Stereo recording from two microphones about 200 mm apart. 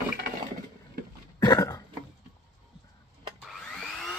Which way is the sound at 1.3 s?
20° left (ahead or behind).